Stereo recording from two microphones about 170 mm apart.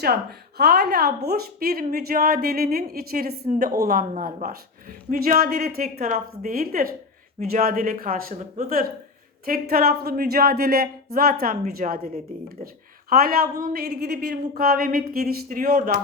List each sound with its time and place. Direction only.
0.0 s a woman's voice: 70° right (ahead or behind)
4.1 s a woman's voice: 50° right (ahead or behind)